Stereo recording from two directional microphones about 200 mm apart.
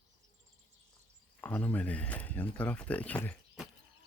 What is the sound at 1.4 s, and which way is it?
Speech, 10° left (ahead or behind).